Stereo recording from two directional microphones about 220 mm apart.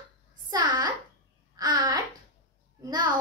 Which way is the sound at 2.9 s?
20° right (ahead or behind).